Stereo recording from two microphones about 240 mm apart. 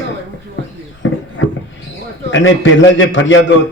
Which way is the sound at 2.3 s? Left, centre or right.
Left.